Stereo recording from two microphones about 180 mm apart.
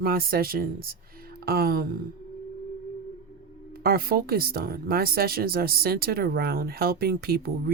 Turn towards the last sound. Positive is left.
turn(degrees=-60)  # may be behind; listen again after turning